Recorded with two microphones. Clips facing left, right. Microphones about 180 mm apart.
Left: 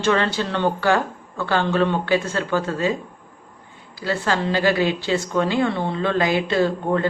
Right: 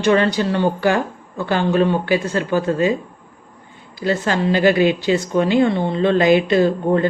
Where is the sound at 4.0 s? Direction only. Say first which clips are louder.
Right 4 dB; 20° right (ahead or behind).